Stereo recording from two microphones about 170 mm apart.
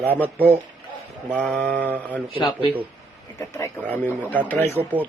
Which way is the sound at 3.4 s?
15° left (ahead or behind).